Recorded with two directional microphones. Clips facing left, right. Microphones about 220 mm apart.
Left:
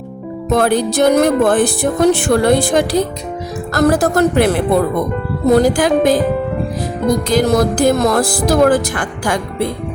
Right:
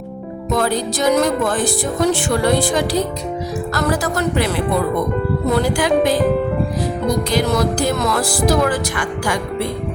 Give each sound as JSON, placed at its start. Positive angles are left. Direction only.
{"t": 0.5, "sound": "speech", "side_deg": 65}
{"t": 7.3, "sound": "speech", "side_deg": 50}